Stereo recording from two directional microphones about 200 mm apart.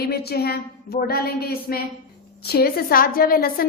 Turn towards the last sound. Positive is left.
turn(degrees=50)  # may be behind; listen again after turning